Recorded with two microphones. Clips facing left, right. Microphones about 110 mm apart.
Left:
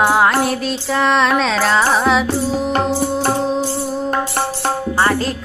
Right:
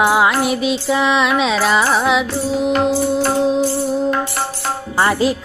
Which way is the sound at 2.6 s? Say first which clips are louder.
Right 2 dB; 40° left (ahead or behind).